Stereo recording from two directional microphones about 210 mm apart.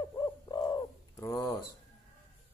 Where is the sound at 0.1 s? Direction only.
20° left (ahead or behind).